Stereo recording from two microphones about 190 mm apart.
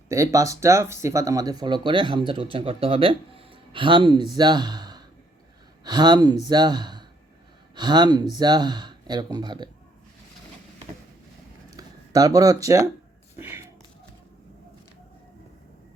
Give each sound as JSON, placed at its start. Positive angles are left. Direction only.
{"t": 0.1, "sound": "speech", "side_deg": -15}
{"t": 11.8, "sound": "speech", "side_deg": -20}